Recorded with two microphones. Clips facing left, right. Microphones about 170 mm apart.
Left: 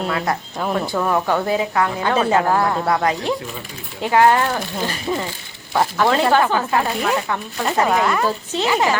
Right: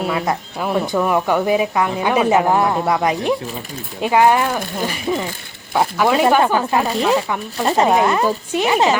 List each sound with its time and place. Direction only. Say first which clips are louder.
0.0 s a woman's voice: right 2 dB; 10° right (ahead or behind)